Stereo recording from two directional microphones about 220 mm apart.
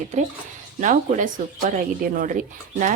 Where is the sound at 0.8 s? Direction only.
35° right (ahead or behind).